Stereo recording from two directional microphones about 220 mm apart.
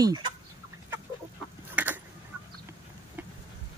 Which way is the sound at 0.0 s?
15° right (ahead or behind).